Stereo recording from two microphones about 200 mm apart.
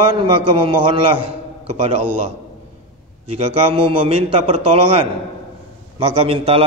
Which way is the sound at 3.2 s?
30° right (ahead or behind).